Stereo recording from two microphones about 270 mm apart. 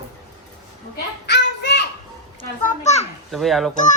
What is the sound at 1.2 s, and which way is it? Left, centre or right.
Child singing, left.